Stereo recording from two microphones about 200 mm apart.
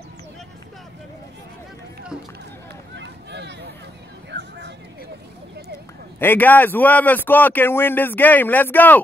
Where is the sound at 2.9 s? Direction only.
60° right (ahead or behind).